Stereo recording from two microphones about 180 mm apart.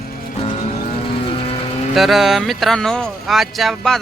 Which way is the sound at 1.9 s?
Centre (ahead or behind).